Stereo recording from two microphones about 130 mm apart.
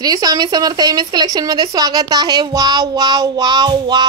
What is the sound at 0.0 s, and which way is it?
Speech, 30° right (ahead or behind).